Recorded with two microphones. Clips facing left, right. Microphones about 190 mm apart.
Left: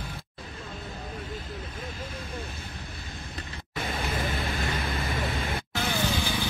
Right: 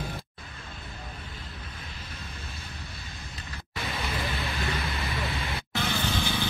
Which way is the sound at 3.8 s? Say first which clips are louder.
Left 2 dB; 50° left (ahead or behind).